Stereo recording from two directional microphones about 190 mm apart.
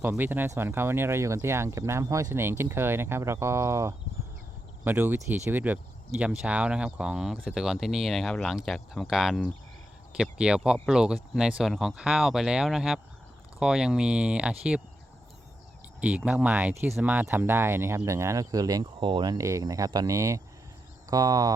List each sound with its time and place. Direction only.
0.0 s speech: 10° right (ahead or behind)
16.0 s speech: 5° right (ahead or behind)